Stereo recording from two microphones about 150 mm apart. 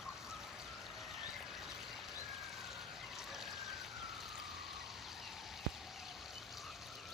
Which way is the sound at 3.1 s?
Centre (ahead or behind).